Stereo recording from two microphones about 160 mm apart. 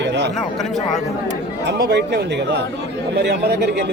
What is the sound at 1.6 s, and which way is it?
Speech, 90° right.